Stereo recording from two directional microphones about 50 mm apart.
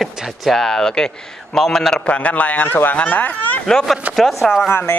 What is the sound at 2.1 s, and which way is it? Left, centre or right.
A man's voice, left.